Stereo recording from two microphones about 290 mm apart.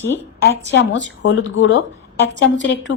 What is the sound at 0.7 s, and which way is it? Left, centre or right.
A woman's voice, left.